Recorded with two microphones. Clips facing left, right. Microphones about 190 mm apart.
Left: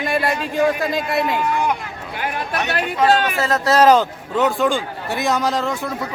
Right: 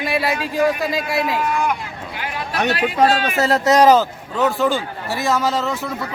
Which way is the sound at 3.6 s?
15° right (ahead or behind).